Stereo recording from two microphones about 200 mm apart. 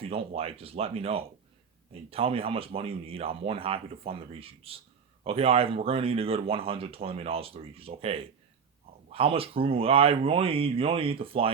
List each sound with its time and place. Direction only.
0.0 s speech: 30° right (ahead or behind)